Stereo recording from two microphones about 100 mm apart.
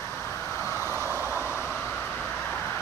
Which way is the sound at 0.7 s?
25° right (ahead or behind).